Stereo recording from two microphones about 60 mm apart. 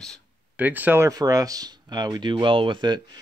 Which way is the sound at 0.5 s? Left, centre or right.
Right.